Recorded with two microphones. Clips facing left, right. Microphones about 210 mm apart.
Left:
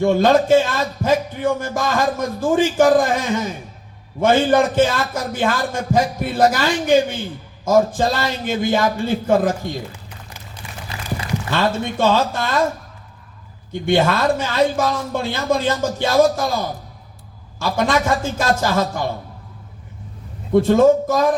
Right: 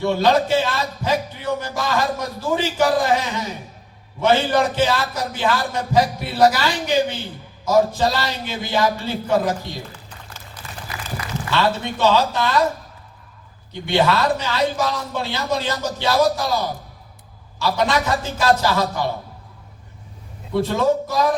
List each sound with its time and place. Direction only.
0.0 s speech: 50° left (ahead or behind)
11.5 s speech: 50° left (ahead or behind)
13.8 s speech: 50° left (ahead or behind)
20.5 s speech: 45° left (ahead or behind)